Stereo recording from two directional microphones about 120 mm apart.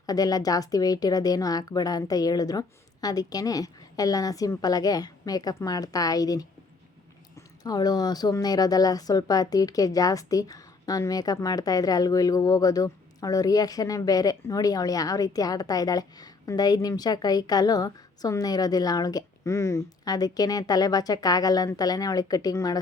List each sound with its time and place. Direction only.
0.0 s a woman's voice: 30° left (ahead or behind)
7.6 s a woman's voice: 35° left (ahead or behind)